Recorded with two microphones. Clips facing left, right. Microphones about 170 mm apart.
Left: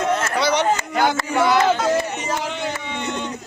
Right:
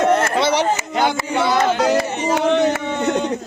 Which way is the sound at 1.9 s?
90° right.